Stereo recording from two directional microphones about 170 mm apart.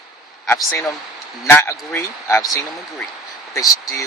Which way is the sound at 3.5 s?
20° left (ahead or behind).